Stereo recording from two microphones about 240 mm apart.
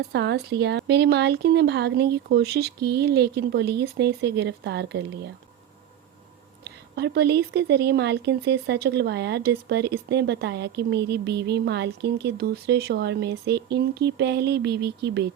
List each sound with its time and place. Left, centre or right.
0.1 s speech: right
6.7 s speech: right